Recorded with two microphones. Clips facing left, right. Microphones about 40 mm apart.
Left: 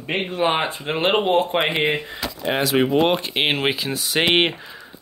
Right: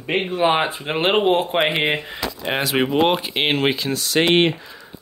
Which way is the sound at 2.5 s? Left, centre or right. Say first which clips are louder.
Left 1 dB; right.